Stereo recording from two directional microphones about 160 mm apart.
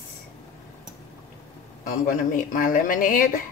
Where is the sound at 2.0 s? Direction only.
55° left (ahead or behind).